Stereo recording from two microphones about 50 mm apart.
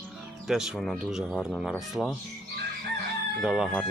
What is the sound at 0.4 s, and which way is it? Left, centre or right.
Speech, centre.